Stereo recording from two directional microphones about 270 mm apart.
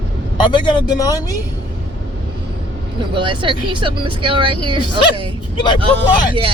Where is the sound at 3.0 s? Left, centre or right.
Centre.